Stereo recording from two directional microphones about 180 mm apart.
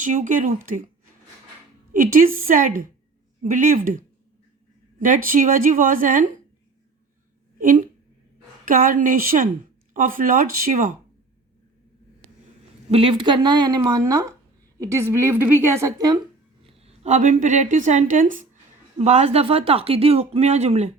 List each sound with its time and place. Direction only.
0.0 s a woman's voice: 45° right (ahead or behind)
1.9 s a woman's voice: 50° right (ahead or behind)
7.6 s a woman's voice: 45° right (ahead or behind)
12.9 s a woman's voice: 30° right (ahead or behind)
16.6 s a woman's voice: 35° right (ahead or behind)